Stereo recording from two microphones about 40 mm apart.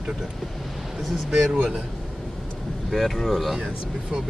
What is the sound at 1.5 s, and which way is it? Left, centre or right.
Speech, right.